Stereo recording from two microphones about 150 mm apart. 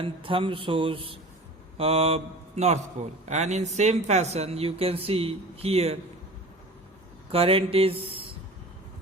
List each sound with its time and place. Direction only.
0.0 s a man's voice: 35° right (ahead or behind)
7.3 s speech: 40° right (ahead or behind)